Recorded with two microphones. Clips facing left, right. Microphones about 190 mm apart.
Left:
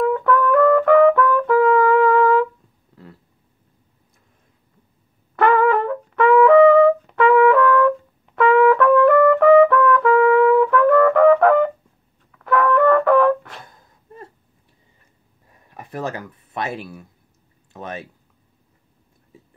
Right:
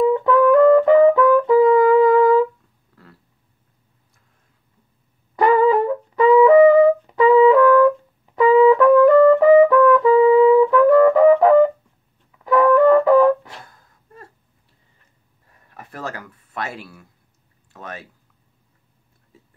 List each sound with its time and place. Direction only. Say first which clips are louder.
0.1 s brass instrument: right 3 dB; 20° right (ahead or behind)
5.3 s brass instrument: right 1 dB; 15° right (ahead or behind)
13.7 s gasp: left 4 dB; 20° left (ahead or behind)
15.7 s a sound: left 4 dB; 20° left (ahead or behind)